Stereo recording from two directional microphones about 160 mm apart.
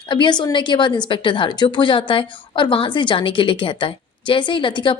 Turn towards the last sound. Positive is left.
turn(degrees=30)  # may be behind; listen again after turning